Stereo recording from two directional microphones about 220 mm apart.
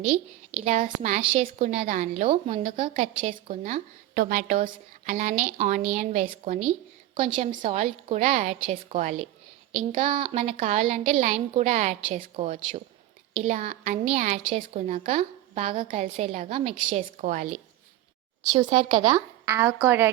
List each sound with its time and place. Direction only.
0.0 s a woman's voice: 30° right (ahead or behind)
18.5 s a woman's voice: 25° right (ahead or behind)
19.5 s speech: 10° right (ahead or behind)